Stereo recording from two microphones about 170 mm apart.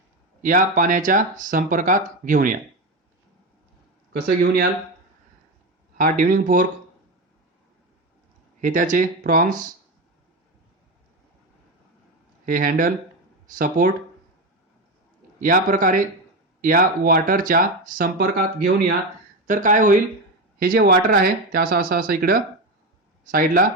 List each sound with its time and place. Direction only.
0.4 s speech: 50° right (ahead or behind)
4.1 s speech: 65° right (ahead or behind)
6.0 s speech: 55° right (ahead or behind)
8.6 s speech: 50° right (ahead or behind)
12.5 s speech: 55° right (ahead or behind)
15.4 s speech: 50° right (ahead or behind)
19.5 s speech: 50° right (ahead or behind)
20.6 s speech: 65° right (ahead or behind)